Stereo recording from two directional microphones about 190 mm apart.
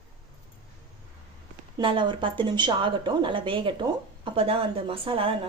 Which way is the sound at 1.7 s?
25° right (ahead or behind).